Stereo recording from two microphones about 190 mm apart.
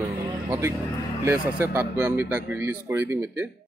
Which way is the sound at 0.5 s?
15° right (ahead or behind).